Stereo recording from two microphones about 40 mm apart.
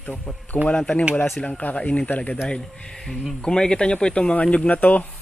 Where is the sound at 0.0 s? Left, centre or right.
Left.